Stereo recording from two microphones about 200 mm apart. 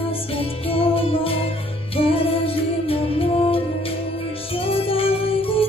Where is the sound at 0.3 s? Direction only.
30° left (ahead or behind).